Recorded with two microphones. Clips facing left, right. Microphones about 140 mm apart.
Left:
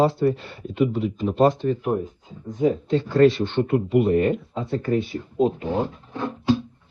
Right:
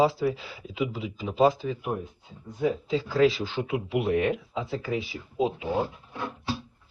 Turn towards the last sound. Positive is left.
turn(degrees=-5)  # may be behind; listen again after turning